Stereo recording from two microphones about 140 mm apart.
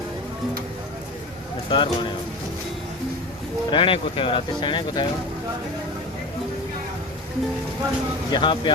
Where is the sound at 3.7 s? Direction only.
40° left (ahead or behind).